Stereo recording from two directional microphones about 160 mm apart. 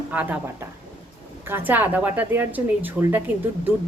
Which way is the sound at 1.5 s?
15° right (ahead or behind).